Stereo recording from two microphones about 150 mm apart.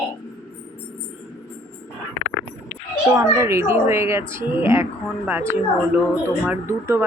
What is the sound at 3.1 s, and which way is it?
Speech, 20° right (ahead or behind).